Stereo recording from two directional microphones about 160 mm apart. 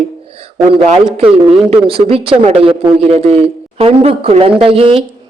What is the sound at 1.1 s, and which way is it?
A man's voice, 35° right (ahead or behind).